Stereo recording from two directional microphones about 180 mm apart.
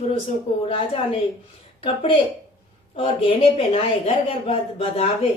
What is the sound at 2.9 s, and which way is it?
A woman's voice, 30° left (ahead or behind).